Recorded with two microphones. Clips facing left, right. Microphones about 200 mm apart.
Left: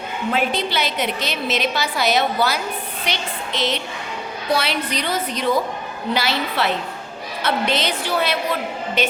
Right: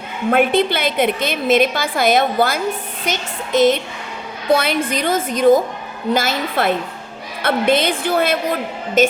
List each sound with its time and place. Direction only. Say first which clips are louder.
0.3 s a woman's voice: right 7 dB; 55° right (ahead or behind)